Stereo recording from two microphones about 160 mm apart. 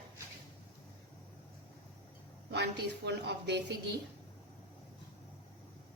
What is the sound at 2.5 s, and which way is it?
Speech, 90° right.